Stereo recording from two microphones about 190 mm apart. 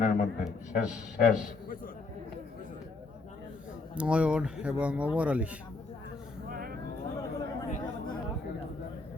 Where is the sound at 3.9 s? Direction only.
5° right (ahead or behind).